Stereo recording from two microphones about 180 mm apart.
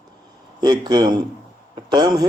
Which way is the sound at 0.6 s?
25° right (ahead or behind).